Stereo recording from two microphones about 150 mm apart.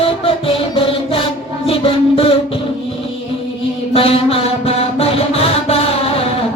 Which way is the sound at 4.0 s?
40° left (ahead or behind).